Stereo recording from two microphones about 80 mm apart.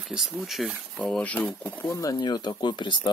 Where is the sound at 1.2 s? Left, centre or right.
Centre.